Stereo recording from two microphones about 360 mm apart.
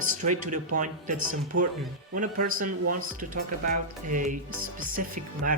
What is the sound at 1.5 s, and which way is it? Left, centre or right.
Speech, right.